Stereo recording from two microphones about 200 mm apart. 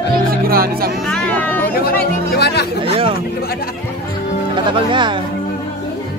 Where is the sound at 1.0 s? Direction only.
5° left (ahead or behind).